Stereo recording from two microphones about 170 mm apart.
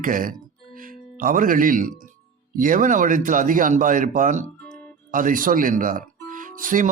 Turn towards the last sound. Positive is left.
turn(degrees=-50)  # may be behind; listen again after turning